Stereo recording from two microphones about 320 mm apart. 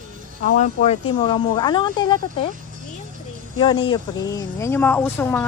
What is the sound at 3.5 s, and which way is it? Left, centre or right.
Speech, centre.